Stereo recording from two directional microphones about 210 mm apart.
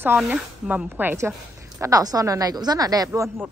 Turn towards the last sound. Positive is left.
turn(degrees=-15)  # may be behind; listen again after turning